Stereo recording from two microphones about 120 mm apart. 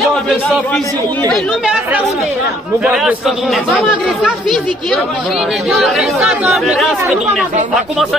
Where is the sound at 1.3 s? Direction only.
5° left (ahead or behind).